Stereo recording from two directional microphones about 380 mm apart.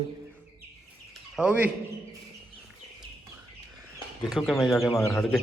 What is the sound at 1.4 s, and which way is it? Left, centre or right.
Speech, centre.